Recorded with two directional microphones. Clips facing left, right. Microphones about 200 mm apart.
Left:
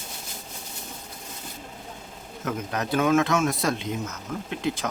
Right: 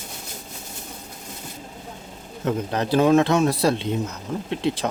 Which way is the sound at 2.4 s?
30° right (ahead or behind).